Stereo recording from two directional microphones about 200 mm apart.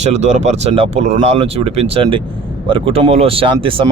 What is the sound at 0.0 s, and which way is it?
Speech, 35° right (ahead or behind).